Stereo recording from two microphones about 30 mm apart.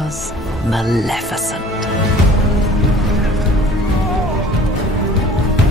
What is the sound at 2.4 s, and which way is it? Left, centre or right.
Music, centre.